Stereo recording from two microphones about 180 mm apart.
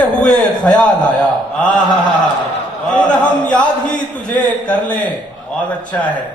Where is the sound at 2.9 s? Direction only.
5° left (ahead or behind).